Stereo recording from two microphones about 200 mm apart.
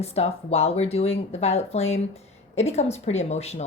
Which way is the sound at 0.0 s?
30° left (ahead or behind).